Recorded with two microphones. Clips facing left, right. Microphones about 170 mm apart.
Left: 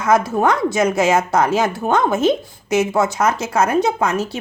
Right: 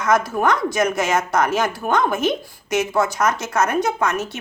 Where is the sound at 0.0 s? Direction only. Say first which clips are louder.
Left 3 dB; 25° left (ahead or behind).